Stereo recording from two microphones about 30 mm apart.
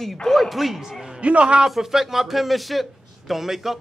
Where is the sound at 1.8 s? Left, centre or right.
Centre.